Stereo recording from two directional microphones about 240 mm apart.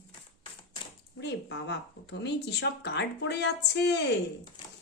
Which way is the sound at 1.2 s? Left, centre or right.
Left.